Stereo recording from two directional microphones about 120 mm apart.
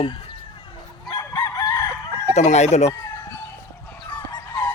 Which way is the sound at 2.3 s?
70° left (ahead or behind).